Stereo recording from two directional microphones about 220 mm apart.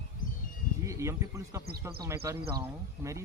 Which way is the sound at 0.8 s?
15° right (ahead or behind).